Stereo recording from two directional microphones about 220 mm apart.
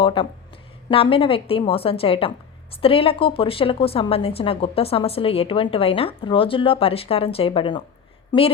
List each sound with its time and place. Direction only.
0.0 s a woman's voice: 25° left (ahead or behind)